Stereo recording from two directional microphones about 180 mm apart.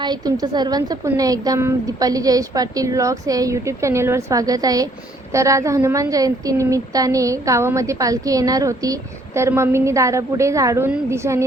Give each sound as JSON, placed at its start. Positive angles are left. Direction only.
{"t": 0.0, "sound": "a woman's voice", "side_deg": -25}